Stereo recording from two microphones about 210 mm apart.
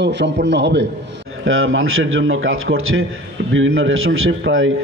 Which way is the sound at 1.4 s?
70° right (ahead or behind).